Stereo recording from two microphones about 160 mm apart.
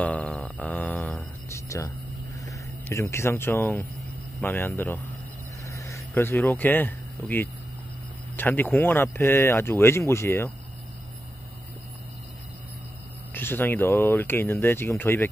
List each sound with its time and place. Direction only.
0.0 s a sound: 10° left (ahead or behind)
2.4 s speech: 20° left (ahead or behind)
13.3 s speech: 15° left (ahead or behind)